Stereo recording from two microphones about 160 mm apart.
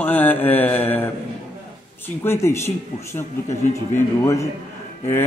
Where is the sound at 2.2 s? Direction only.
15° left (ahead or behind).